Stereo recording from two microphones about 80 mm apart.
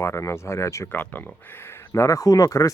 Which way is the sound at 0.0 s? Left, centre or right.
Left.